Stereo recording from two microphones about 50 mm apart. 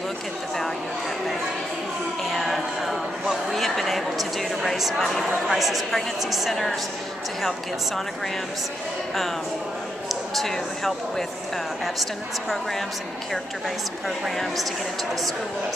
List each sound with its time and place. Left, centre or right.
2.3 s a sound: centre
5.2 s a woman's voice: centre
10.0 s a woman's voice: centre
14.0 s a woman's voice: centre